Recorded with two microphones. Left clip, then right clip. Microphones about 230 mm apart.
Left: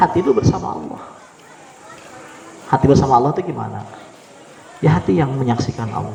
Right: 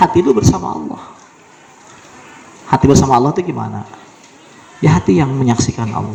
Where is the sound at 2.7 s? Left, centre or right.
Right.